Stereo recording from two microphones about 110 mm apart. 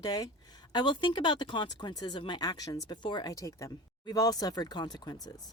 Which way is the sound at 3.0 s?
45° left (ahead or behind).